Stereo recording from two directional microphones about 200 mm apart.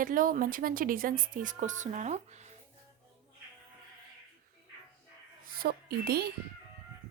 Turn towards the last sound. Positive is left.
turn(degrees=-50)  # may be behind; listen again after turning